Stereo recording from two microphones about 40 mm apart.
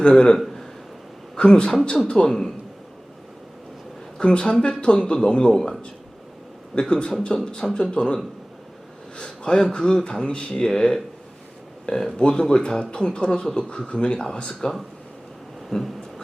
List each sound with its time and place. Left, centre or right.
0.0 s speech: left
0.3 s a sound: centre
1.4 s a man's voice: left
4.2 s speech: left
5.5 s a man's voice: centre
6.7 s speech: left
12.1 s speech: left
15.7 s a sound: centre